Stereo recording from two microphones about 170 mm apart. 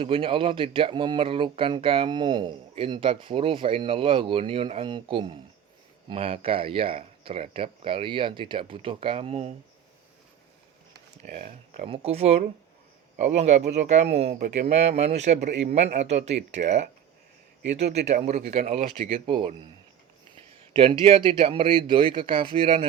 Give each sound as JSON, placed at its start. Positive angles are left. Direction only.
{"t": 0.0, "sound": "speech", "side_deg": -30}
{"t": 11.3, "sound": "speech", "side_deg": -55}
{"t": 11.9, "sound": "speech", "side_deg": -35}
{"t": 14.3, "sound": "speech", "side_deg": -60}
{"t": 14.7, "sound": "speech", "side_deg": -40}